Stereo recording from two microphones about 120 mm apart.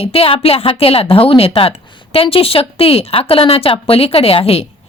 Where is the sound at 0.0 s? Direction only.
55° left (ahead or behind).